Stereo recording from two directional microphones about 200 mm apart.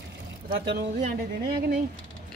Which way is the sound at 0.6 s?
60° right (ahead or behind).